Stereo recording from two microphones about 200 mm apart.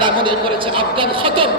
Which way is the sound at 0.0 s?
25° right (ahead or behind).